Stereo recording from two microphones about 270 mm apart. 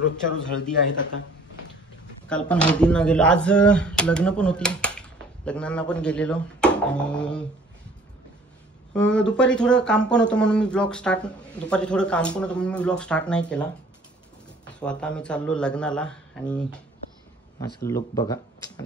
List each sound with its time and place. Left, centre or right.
2.2 s speech: centre
8.9 s speech: centre
14.8 s speech: centre
17.8 s speech: centre